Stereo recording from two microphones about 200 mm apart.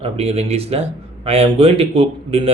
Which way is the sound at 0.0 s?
30° right (ahead or behind).